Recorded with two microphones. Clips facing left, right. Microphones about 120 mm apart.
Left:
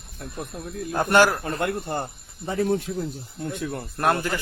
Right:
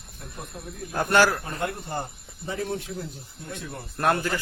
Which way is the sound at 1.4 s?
70° left (ahead or behind).